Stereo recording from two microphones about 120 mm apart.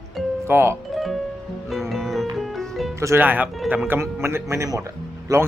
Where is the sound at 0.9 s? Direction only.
Centre (ahead or behind).